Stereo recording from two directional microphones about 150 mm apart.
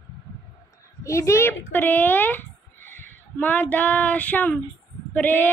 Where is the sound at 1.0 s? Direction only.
20° left (ahead or behind).